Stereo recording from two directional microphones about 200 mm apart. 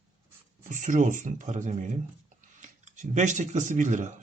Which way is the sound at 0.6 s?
40° right (ahead or behind).